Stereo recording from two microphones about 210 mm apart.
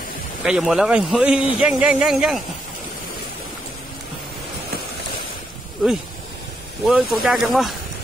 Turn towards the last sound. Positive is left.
turn(degrees=0)  # may be behind; listen again after turning